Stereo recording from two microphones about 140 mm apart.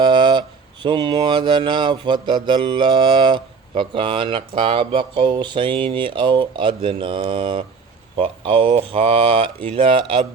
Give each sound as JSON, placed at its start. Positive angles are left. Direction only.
{"t": 0.0, "sound": "speech", "side_deg": -35}